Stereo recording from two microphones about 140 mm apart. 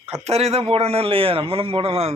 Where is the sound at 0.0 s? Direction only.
50° right (ahead or behind).